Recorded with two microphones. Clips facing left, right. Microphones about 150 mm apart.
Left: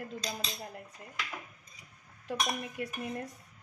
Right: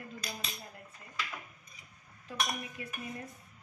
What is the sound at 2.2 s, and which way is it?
Speech, 70° left (ahead or behind).